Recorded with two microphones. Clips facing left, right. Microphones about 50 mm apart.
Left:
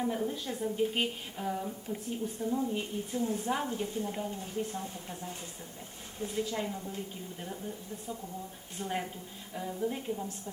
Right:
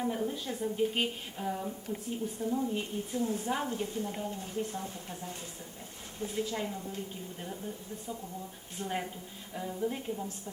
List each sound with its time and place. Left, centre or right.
0.0 s a woman's voice: centre